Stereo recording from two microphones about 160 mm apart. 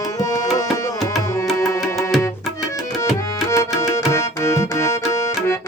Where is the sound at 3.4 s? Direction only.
20° left (ahead or behind).